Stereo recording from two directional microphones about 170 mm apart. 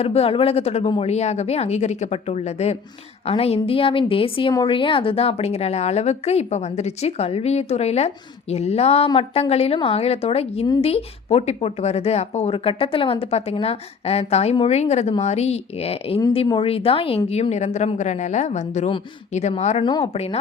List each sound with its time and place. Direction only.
0.0 s a woman's voice: 35° left (ahead or behind)
19.8 s speech: 25° left (ahead or behind)
20.1 s a woman's voice: 40° left (ahead or behind)